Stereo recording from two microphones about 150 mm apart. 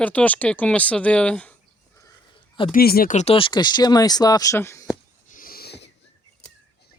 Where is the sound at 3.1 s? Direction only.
40° left (ahead or behind); by 4.8 s 20° left (ahead or behind).